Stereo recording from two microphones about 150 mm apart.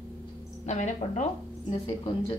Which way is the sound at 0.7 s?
55° left (ahead or behind).